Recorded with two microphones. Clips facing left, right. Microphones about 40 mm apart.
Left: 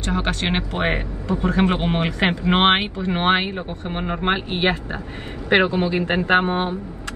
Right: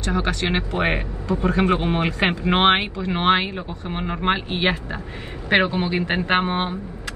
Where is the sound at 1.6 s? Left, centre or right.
Left.